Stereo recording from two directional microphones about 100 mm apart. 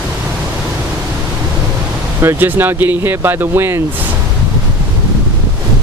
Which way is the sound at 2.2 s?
20° right (ahead or behind).